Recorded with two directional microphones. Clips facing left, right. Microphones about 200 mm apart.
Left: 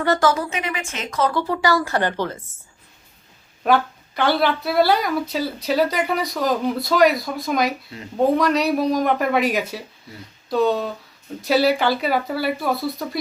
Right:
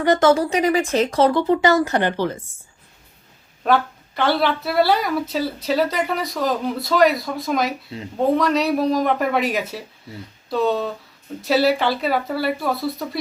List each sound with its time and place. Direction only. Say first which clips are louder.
0.0 s speech: right 4 dB; 20° right (ahead or behind)
1.3 s speech: right 4 dB; 20° right (ahead or behind)
3.6 s a woman's voice: even; centre (ahead or behind)